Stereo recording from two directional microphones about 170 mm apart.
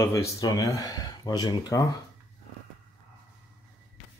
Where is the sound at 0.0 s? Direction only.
15° left (ahead or behind).